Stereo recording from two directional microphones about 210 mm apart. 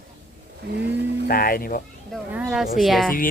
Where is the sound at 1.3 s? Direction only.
45° left (ahead or behind).